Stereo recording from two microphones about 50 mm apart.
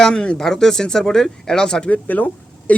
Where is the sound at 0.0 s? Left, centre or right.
Centre.